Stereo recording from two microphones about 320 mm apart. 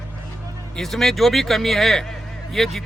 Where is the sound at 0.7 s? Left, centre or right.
Centre.